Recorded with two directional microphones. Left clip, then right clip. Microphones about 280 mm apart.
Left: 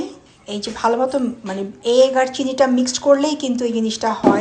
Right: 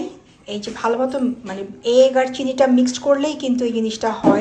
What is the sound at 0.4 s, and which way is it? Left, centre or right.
A woman's voice, centre.